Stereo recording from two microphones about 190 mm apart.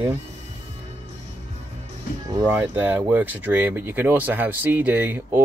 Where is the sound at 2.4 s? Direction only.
10° right (ahead or behind).